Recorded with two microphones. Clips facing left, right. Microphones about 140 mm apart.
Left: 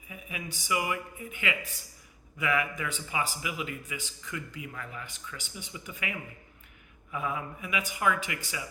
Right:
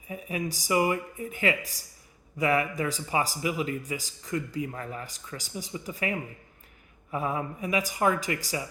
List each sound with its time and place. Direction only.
0.1 s speech: 35° right (ahead or behind)